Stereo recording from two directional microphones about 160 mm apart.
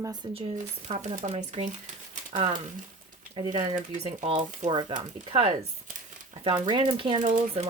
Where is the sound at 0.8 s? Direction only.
45° right (ahead or behind).